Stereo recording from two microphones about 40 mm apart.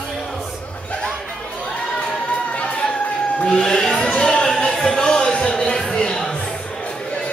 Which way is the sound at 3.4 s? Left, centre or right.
Centre.